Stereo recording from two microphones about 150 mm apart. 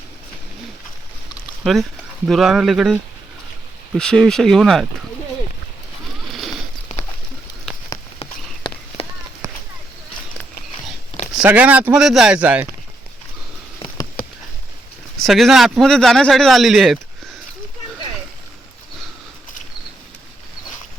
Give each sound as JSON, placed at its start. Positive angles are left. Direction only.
{"t": 1.6, "sound": "speech", "side_deg": 0}
{"t": 6.9, "sound": "a sound", "side_deg": 55}
{"t": 11.3, "sound": "speech", "side_deg": -10}
{"t": 15.2, "sound": "speech", "side_deg": 0}